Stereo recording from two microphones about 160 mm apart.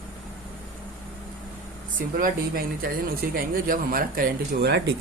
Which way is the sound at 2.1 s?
65° right (ahead or behind).